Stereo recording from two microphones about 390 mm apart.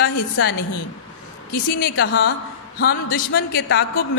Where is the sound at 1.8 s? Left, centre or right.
Left.